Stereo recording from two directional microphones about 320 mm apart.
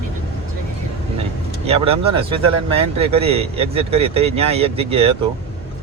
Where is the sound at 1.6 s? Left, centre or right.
Centre.